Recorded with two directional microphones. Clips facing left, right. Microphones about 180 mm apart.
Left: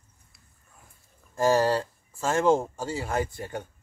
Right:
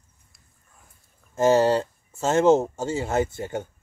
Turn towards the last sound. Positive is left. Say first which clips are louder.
# right 5 dB
turn(degrees=-25)  # may be behind; listen again after turning